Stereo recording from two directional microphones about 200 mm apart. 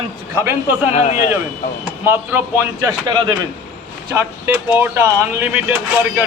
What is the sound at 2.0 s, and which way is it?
Speech, 10° right (ahead or behind).